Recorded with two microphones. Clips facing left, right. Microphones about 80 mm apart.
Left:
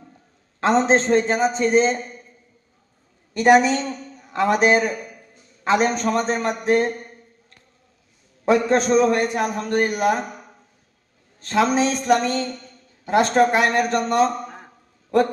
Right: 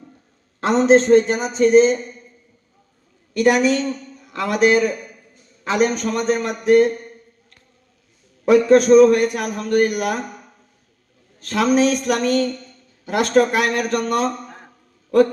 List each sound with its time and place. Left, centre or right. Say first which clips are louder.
0.6 s a man's voice: right 3 dB; left
3.3 s a man's voice: left 1 dB; left
8.4 s a man's voice: right 6 dB; left
11.3 s a man's voice: right 2 dB; left